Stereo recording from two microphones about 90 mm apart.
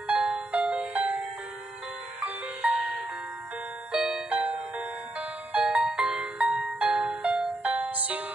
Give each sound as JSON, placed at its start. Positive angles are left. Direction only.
{"t": 0.0, "sound": "music", "side_deg": -10}
{"t": 3.9, "sound": "music", "side_deg": -5}